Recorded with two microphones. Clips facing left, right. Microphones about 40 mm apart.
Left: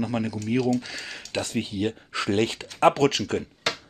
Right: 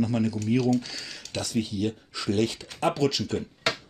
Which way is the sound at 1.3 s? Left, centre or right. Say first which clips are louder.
Left 1 dB; left.